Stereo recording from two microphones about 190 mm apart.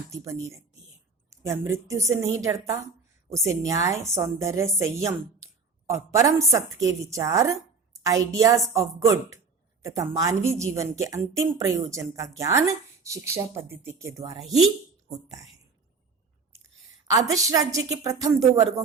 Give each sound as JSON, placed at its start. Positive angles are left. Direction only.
{"t": 0.1, "sound": "a woman's voice", "side_deg": -15}
{"t": 17.1, "sound": "a woman's voice", "side_deg": -15}